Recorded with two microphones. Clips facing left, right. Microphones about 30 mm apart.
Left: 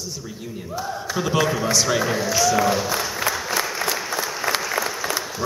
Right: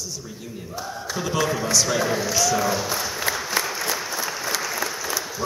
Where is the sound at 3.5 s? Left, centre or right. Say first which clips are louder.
Left 1 dB; centre.